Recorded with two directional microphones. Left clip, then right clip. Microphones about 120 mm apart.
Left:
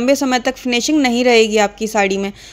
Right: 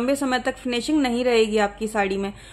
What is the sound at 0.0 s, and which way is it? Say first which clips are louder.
A woman's voice: left 7 dB; 55° left (ahead or behind).